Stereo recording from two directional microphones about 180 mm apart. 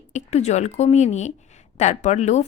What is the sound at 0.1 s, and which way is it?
A woman's voice, 40° left (ahead or behind).